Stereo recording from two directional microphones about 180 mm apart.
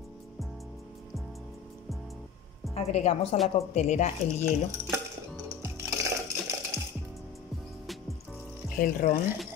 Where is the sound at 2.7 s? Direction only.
35° left (ahead or behind).